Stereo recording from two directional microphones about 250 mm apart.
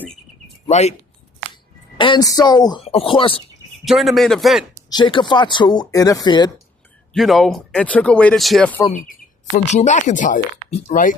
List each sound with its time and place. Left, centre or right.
0.7 s speech: left
2.0 s speech: centre
3.8 s speech: centre
4.9 s speech: centre
7.1 s speech: centre
9.6 s speech: left